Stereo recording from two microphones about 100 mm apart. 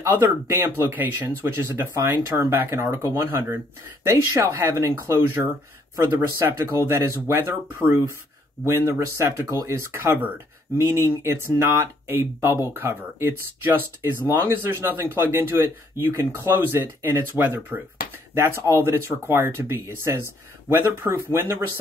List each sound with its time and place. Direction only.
0.0 s speech: 25° right (ahead or behind)